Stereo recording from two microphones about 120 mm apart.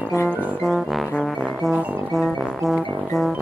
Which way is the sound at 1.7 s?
10° right (ahead or behind).